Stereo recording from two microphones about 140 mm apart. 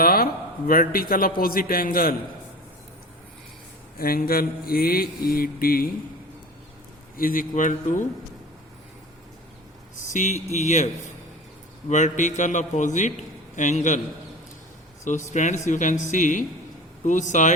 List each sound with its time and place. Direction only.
0.0 s a sound: 90° left
0.7 s mantra: 90° left
3.9 s mantra: 90° left
7.2 s speech: 90° left; by 8.0 s 65° left (ahead or behind)
10.1 s a man's voice: 60° left (ahead or behind)
11.9 s a man's voice: 60° left (ahead or behind)
15.0 s a man's voice: 60° left (ahead or behind)